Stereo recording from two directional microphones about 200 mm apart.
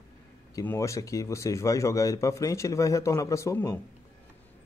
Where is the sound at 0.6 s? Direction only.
15° left (ahead or behind).